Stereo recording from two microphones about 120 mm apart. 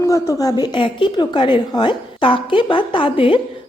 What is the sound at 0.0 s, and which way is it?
A woman's voice, 25° left (ahead or behind).